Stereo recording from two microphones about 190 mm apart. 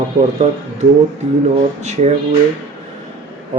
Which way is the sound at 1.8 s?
35° right (ahead or behind).